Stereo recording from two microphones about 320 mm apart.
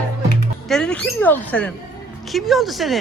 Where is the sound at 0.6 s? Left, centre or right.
Centre.